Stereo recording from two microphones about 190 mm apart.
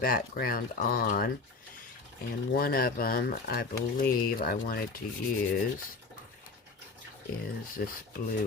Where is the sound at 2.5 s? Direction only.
50° left (ahead or behind).